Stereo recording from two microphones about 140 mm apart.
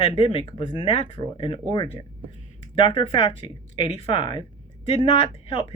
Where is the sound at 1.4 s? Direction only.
40° left (ahead or behind).